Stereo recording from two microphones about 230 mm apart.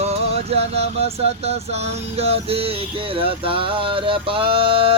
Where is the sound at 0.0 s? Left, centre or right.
Right.